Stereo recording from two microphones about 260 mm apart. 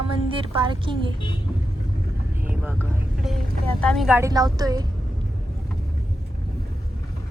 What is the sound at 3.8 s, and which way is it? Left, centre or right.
Music, centre.